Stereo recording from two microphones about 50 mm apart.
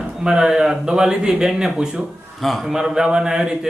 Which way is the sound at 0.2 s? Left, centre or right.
Centre.